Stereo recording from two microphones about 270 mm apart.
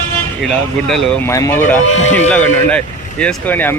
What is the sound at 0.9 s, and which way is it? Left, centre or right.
Speech, centre.